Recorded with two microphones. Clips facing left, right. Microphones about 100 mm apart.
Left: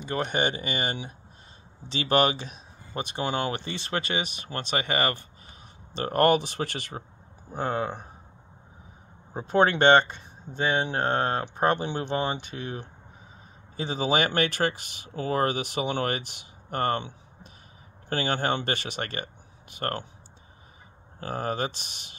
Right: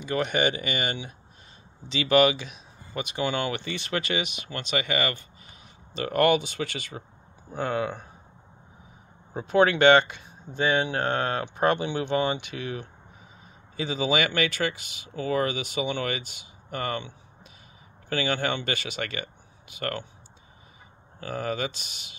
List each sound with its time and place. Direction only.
0.0 s speech: 30° left (ahead or behind)
9.3 s speech: 45° left (ahead or behind)
21.2 s speech: 45° left (ahead or behind)